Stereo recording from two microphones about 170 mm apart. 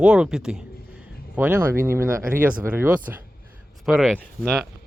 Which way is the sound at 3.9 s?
5° left (ahead or behind).